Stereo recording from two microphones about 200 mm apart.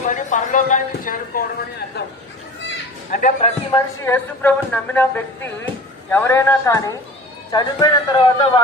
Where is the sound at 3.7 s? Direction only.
10° left (ahead or behind).